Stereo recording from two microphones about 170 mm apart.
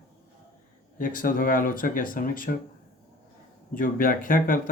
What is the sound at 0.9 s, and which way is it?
Speech, 55° left (ahead or behind).